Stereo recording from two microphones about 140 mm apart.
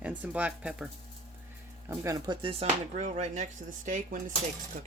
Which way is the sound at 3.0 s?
55° right (ahead or behind).